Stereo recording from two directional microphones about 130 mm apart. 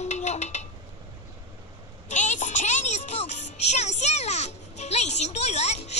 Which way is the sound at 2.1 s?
65° left (ahead or behind).